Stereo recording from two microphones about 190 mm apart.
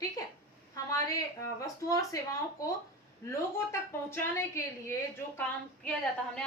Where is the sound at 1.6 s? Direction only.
15° left (ahead or behind).